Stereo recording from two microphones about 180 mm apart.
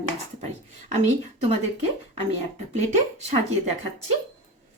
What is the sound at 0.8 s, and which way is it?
Speech, 40° right (ahead or behind).